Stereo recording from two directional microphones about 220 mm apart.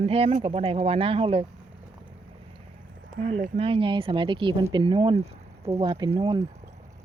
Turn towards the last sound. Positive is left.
turn(degrees=-25)  # may be behind; listen again after turning